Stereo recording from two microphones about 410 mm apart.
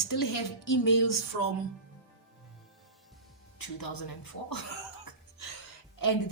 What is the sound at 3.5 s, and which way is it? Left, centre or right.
Speech, left.